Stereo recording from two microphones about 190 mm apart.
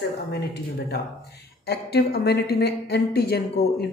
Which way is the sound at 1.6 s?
60° left (ahead or behind).